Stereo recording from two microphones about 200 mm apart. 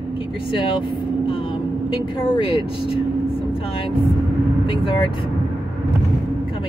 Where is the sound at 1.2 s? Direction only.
25° left (ahead or behind).